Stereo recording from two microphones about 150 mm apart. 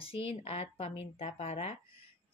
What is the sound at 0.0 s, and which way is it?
Speech, 40° left (ahead or behind).